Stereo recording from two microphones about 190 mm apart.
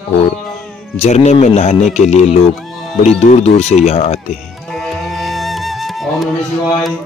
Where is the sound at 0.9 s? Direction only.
35° left (ahead or behind).